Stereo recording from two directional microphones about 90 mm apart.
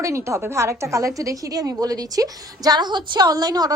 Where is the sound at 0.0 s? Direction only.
35° right (ahead or behind).